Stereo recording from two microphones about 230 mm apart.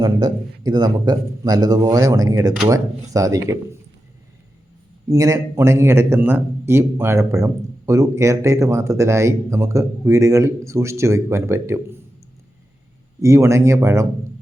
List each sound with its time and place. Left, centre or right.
0.0 s a man's voice: centre
5.0 s a man's voice: centre
13.2 s a man's voice: centre